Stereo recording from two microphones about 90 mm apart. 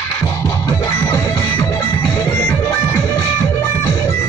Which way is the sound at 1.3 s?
20° left (ahead or behind).